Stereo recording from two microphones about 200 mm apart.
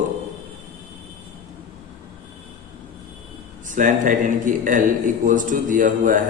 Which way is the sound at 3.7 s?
40° right (ahead or behind).